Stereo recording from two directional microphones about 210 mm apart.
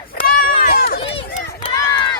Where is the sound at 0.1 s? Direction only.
40° left (ahead or behind).